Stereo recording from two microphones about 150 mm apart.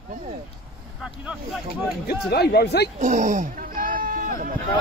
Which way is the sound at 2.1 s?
90° left.